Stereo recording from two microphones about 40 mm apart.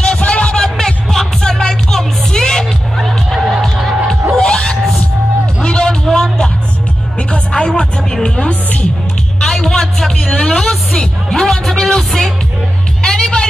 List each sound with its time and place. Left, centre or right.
0.0 s music: left
3.0 s music: centre
4.4 s music: left
5.6 s a sound: left
7.2 s music: left
9.4 s music: centre
13.0 s music: centre